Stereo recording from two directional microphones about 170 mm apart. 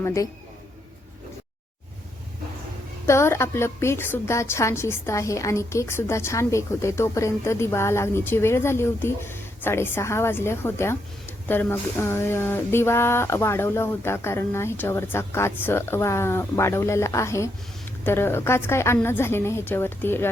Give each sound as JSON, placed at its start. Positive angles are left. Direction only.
{"t": 0.0, "sound": "speech", "side_deg": 20}
{"t": 3.1, "sound": "a woman's voice", "side_deg": 15}